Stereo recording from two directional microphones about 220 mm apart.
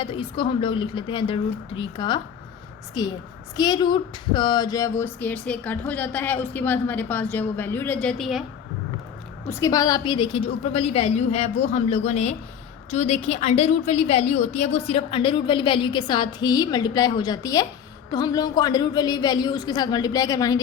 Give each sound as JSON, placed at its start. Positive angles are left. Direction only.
{"t": 0.0, "sound": "a woman's voice", "side_deg": 20}
{"t": 9.5, "sound": "a woman's voice", "side_deg": 15}